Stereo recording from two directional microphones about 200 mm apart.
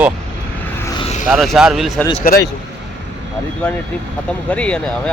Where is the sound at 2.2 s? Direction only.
45° left (ahead or behind).